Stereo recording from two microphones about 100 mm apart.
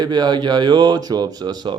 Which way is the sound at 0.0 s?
45° right (ahead or behind).